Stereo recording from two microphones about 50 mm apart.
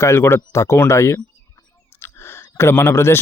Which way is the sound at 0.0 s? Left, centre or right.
Left.